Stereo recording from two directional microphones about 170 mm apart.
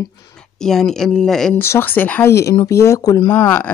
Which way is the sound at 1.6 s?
15° left (ahead or behind).